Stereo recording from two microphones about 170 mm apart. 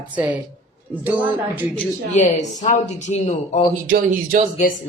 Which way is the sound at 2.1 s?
45° left (ahead or behind).